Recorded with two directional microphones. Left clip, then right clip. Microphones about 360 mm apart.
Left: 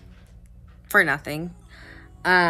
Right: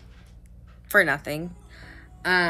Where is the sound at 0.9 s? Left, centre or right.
Centre.